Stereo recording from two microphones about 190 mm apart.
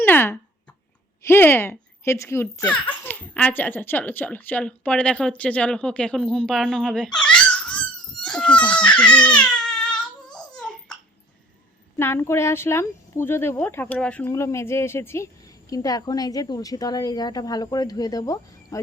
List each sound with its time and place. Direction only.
0.0 s a sound: 10° left (ahead or behind)
1.3 s a woman's voice: 10° left (ahead or behind)
2.7 s a woman's voice: 25° left (ahead or behind)
3.0 s a woman's voice: 10° left (ahead or behind)
7.2 s a sound: 5° left (ahead or behind)
11.9 s a woman's voice: 10° left (ahead or behind)